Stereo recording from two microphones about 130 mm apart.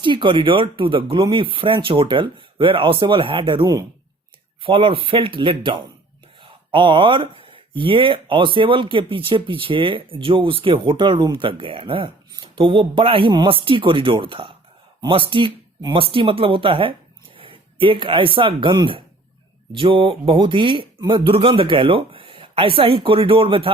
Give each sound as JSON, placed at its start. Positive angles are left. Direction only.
{"t": 0.0, "sound": "speech", "side_deg": -40}
{"t": 17.3, "sound": "a sound", "side_deg": -45}
{"t": 18.3, "sound": "speech", "side_deg": -40}